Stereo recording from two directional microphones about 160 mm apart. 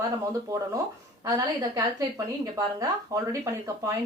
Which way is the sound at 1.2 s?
20° right (ahead or behind).